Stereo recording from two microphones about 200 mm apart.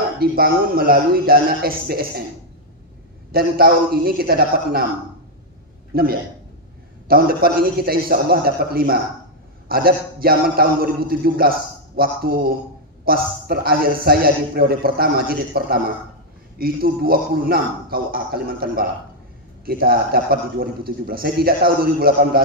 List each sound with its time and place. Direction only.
0.2 s a man's voice: 50° right (ahead or behind)
3.3 s a man's voice: 50° right (ahead or behind)
5.9 s a man's voice: 50° right (ahead or behind)